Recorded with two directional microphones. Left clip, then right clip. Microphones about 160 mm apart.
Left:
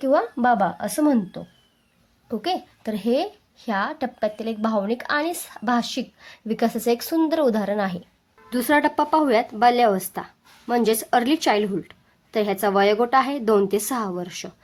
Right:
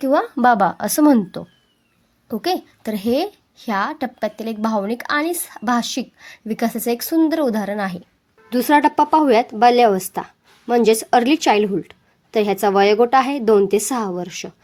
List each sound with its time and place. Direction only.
0.0 s a woman's voice: 15° right (ahead or behind)
2.2 s a woman's voice: 20° right (ahead or behind)